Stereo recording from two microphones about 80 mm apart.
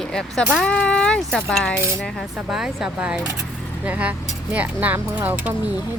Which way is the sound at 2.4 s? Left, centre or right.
Centre.